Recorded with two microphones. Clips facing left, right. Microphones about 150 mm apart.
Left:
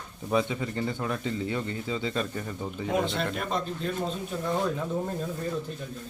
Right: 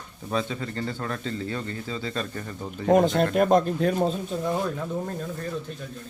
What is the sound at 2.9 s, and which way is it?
Speech, 45° right (ahead or behind).